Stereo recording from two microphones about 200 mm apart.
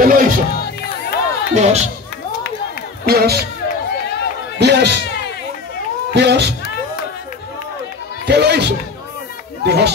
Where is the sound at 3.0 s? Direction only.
50° right (ahead or behind).